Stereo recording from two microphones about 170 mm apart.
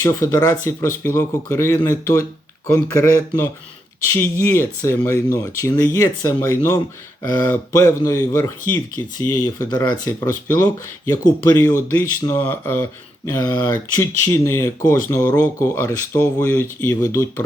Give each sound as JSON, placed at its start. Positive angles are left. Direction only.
{"t": 0.0, "sound": "speech", "side_deg": 15}
{"t": 7.8, "sound": "speech", "side_deg": 15}
{"t": 13.3, "sound": "speech", "side_deg": 25}